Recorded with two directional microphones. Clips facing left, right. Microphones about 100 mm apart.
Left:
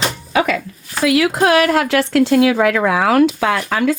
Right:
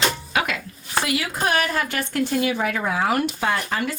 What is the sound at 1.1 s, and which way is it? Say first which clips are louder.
Speech: left 11 dB; 90° left.